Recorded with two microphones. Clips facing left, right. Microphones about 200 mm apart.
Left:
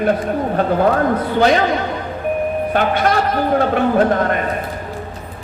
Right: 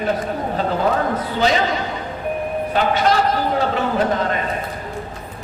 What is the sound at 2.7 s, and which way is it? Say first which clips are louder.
A man's voice: right 1 dB; 55° left (ahead or behind).